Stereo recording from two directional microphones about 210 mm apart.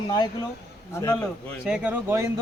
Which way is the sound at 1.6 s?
5° right (ahead or behind).